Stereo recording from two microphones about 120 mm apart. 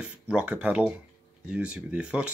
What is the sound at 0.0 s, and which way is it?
Speech, 10° right (ahead or behind).